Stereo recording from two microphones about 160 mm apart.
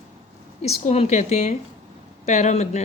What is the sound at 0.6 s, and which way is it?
A woman's voice, 40° left (ahead or behind).